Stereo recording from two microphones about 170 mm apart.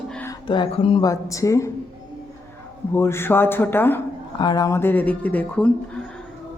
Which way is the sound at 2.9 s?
15° left (ahead or behind).